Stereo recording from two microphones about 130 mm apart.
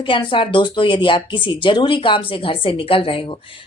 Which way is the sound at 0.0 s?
40° left (ahead or behind).